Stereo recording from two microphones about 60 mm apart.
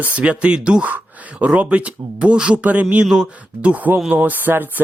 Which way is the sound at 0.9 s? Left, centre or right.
Right.